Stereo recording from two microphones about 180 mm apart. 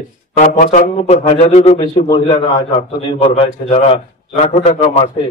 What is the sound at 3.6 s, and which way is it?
A man's voice, 35° left (ahead or behind).